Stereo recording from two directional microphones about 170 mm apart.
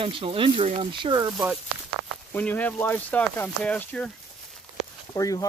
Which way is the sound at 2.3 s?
10° left (ahead or behind).